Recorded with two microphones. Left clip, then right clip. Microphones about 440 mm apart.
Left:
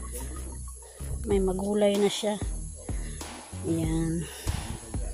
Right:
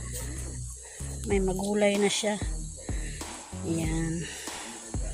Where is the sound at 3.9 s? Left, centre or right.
Left.